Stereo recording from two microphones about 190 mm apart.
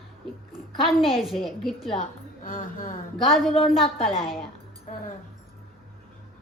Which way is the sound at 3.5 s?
30° left (ahead or behind).